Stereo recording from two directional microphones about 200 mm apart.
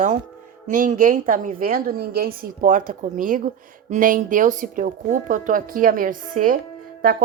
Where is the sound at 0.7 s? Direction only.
40° right (ahead or behind).